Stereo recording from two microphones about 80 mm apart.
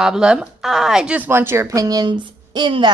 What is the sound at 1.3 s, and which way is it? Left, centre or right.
Speech, right.